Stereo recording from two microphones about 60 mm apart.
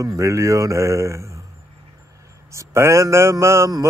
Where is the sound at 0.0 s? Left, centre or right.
Right.